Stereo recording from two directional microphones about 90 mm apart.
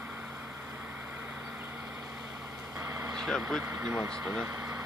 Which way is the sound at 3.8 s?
10° right (ahead or behind).